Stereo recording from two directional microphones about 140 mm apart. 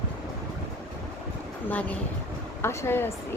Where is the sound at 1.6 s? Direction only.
10° left (ahead or behind).